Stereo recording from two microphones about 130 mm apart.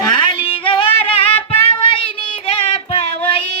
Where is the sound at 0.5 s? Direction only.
40° left (ahead or behind).